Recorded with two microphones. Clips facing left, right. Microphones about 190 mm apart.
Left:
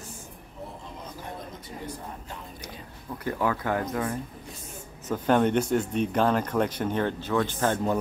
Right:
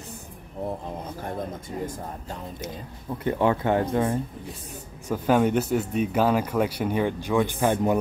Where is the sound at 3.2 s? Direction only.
25° right (ahead or behind).